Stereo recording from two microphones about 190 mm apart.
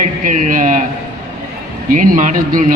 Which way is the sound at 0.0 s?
45° right (ahead or behind).